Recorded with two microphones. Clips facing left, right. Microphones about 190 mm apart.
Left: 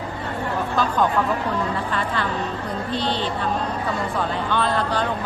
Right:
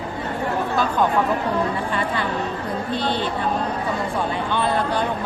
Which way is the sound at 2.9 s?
50° right (ahead or behind).